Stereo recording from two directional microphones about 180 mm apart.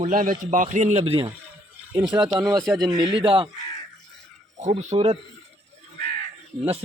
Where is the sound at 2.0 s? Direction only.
25° right (ahead or behind).